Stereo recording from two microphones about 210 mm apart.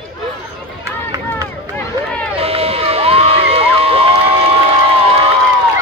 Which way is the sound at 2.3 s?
30° right (ahead or behind).